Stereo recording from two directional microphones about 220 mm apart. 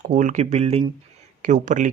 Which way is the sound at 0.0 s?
35° right (ahead or behind).